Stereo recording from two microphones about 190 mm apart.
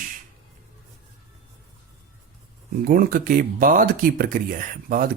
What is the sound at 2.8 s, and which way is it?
Speech, 50° right (ahead or behind).